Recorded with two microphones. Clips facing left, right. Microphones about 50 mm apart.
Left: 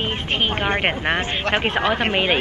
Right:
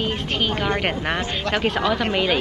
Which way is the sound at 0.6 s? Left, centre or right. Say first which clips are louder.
Left 2 dB; left.